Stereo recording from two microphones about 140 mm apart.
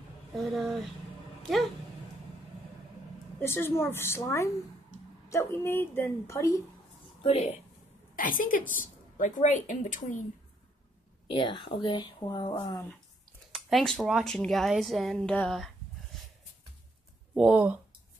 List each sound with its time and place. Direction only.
0.3 s speech: centre (ahead or behind)
3.3 s a woman's voice: 15° left (ahead or behind)
7.2 s speech: 50° left (ahead or behind)
8.2 s a woman's voice: 80° left
8.7 s speech: 65° left (ahead or behind)
11.2 s speech: 35° left (ahead or behind)
13.5 s speech: centre (ahead or behind)
17.3 s speech: 10° right (ahead or behind)